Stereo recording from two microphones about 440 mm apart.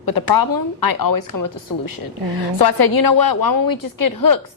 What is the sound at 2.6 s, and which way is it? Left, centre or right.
A woman's voice, left.